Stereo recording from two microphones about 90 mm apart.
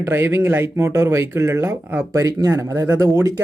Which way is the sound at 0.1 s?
30° right (ahead or behind).